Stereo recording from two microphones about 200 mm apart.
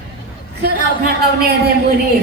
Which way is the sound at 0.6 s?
50° right (ahead or behind).